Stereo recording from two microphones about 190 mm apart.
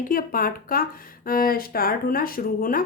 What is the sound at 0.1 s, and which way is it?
A woman's voice, 50° left (ahead or behind).